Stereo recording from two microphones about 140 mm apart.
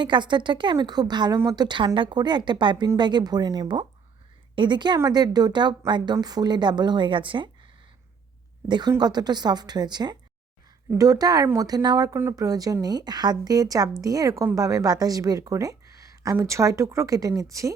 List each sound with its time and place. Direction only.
0.0 s a woman's voice: 35° right (ahead or behind)
8.6 s a woman's voice: 30° right (ahead or behind)